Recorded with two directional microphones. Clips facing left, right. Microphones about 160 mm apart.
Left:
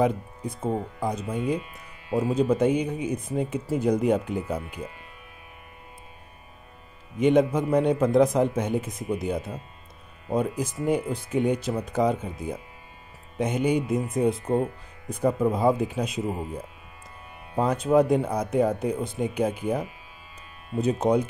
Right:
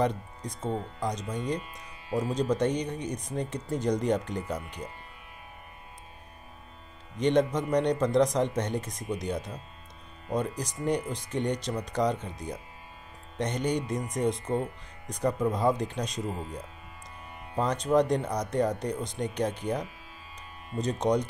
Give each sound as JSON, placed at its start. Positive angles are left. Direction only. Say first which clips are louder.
{"t": 0.0, "sound": "speech", "louder": "left 4 dB", "side_deg": 5}
{"t": 7.2, "sound": "speech", "louder": "left 4 dB", "side_deg": 5}
{"t": 14.4, "sound": "speech", "louder": "left 5 dB", "side_deg": 35}
{"t": 15.0, "sound": "speech", "louder": "left 4 dB", "side_deg": 5}
{"t": 17.6, "sound": "speech", "louder": "left 4 dB", "side_deg": 5}